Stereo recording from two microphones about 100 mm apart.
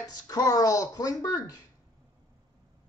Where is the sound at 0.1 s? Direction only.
40° left (ahead or behind).